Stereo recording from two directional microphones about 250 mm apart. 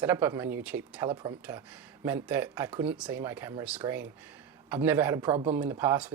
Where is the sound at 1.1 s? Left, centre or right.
Centre.